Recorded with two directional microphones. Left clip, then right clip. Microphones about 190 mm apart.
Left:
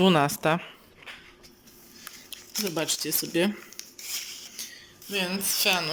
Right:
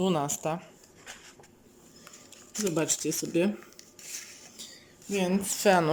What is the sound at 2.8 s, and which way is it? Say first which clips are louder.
Speech: left 1 dB; 10° right (ahead or behind).